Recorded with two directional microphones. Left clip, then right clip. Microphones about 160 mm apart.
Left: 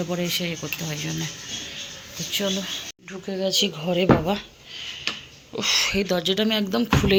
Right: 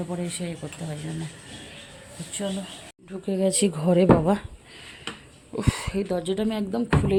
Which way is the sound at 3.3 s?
40° right (ahead or behind).